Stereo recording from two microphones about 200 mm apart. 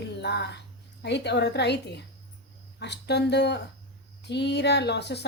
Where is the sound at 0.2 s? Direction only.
60° left (ahead or behind).